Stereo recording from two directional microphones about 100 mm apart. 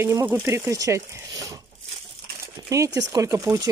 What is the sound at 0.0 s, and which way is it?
Speech, 25° right (ahead or behind).